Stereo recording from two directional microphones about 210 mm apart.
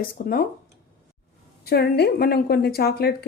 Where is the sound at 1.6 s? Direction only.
50° left (ahead or behind).